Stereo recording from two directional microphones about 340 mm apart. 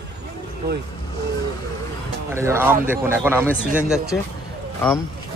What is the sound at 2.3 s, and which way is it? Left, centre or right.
Speech, centre.